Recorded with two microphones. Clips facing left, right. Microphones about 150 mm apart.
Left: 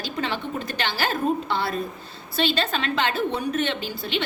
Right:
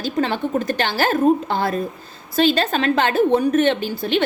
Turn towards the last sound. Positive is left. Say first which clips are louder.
# right 8 dB
turn(degrees=-50)  # may be behind; listen again after turning